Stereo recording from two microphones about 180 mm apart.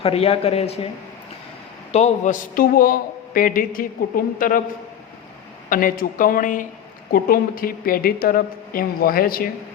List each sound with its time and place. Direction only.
0.0 s speech: 35° left (ahead or behind)
1.9 s a man's voice: 35° left (ahead or behind)
5.6 s a man's voice: 50° left (ahead or behind)